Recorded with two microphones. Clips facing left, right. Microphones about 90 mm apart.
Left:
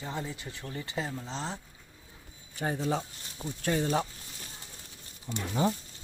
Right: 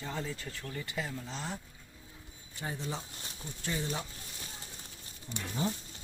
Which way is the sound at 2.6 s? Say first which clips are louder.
Left 8 dB; 65° left (ahead or behind).